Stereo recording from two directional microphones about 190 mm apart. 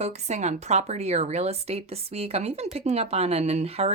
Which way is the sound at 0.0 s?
35° right (ahead or behind).